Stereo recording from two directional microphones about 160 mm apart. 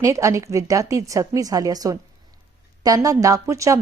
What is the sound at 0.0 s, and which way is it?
A woman's voice, 20° right (ahead or behind).